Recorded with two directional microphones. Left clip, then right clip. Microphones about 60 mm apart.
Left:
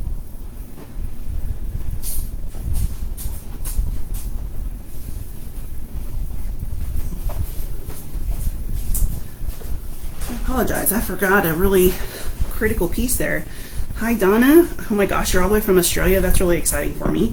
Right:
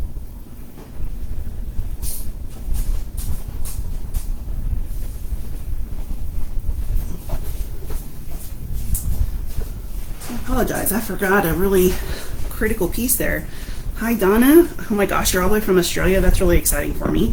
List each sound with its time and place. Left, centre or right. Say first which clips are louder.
10.4 s speech: even; left
11.3 s speech: left 1 dB; left
12.2 s speech: left 2 dB; centre